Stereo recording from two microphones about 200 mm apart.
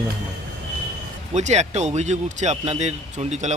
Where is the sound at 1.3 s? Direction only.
35° right (ahead or behind).